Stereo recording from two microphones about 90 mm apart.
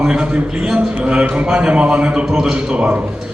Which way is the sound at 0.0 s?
10° right (ahead or behind).